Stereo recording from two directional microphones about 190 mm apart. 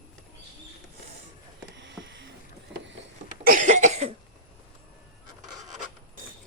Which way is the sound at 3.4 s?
45° right (ahead or behind).